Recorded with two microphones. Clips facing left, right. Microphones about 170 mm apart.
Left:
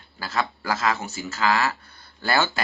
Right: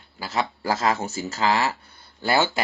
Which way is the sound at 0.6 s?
30° right (ahead or behind).